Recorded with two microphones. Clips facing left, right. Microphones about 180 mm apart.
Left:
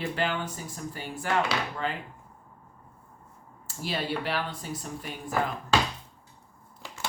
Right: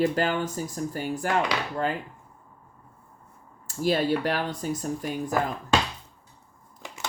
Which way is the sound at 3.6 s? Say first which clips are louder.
Right 8 dB; 45° right (ahead or behind).